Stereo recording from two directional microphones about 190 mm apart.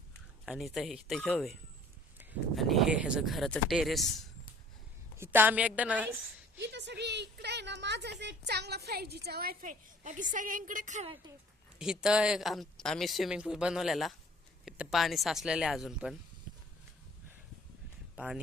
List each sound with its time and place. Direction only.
0.4 s speech: centre (ahead or behind)
2.6 s speech: centre (ahead or behind)
5.1 s a woman's voice: 10° right (ahead or behind)
6.6 s a woman's voice: 65° right (ahead or behind); by 11.1 s 40° right (ahead or behind)
11.8 s speech: 5° right (ahead or behind)